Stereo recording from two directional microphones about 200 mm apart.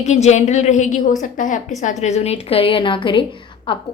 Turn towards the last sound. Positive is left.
turn(degrees=25)  # may be behind; listen again after turning